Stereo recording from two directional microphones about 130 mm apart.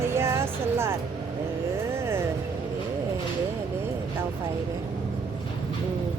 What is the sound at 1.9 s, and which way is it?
Vehicle, 20° right (ahead or behind).